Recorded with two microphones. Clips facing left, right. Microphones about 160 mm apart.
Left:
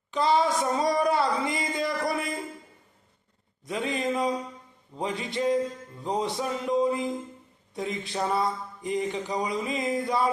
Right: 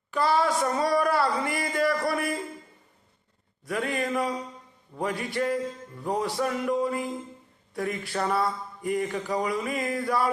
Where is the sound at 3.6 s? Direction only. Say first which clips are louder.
Even; 20° left (ahead or behind).